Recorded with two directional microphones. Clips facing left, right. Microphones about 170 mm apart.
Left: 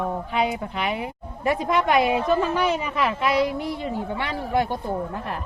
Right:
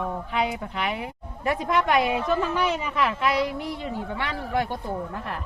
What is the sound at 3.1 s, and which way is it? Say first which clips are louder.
Speech: left 1 dB; 20° left (ahead or behind).